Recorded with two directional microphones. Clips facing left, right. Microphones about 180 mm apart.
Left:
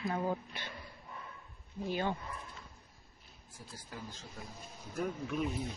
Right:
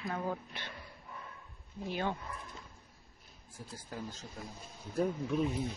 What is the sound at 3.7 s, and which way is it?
Speech, 40° right (ahead or behind).